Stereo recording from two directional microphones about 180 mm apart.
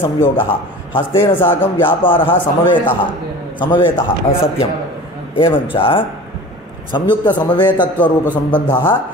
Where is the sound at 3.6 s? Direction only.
30° left (ahead or behind).